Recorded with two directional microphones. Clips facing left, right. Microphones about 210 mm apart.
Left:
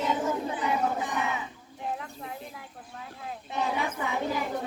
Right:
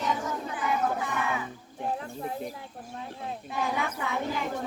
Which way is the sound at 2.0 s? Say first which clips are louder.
Right 5 dB; 35° right (ahead or behind).